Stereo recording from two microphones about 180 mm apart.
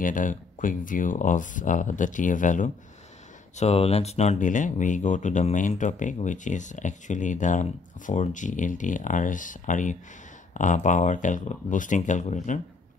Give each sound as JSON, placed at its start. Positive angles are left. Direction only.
{"t": 0.0, "sound": "speech", "side_deg": 45}